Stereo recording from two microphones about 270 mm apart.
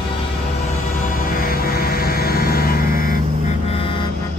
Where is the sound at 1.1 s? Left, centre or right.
Left.